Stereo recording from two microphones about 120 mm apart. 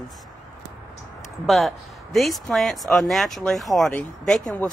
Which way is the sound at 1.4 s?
Centre (ahead or behind).